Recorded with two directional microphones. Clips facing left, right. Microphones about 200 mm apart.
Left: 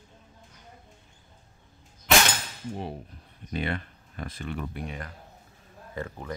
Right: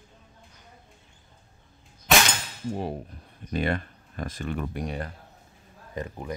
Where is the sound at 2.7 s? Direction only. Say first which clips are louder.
Right 5 dB; 45° right (ahead or behind).